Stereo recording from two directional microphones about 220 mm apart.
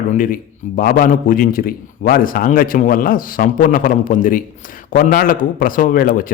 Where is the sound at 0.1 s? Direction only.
40° left (ahead or behind).